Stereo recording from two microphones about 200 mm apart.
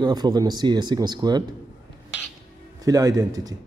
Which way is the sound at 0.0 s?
20° right (ahead or behind).